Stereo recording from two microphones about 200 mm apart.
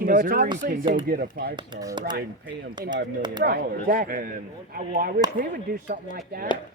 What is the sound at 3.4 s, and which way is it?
Speech, 50° right (ahead or behind).